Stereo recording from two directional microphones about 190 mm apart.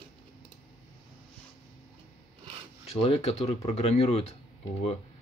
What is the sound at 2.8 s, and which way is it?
Speech, 30° left (ahead or behind).